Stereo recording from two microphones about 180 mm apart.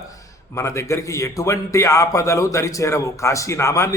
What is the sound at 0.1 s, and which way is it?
A man's voice, 15° left (ahead or behind).